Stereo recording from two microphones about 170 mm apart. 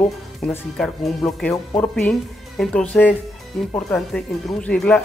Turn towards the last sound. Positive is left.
turn(degrees=5)  # may be behind; listen again after turning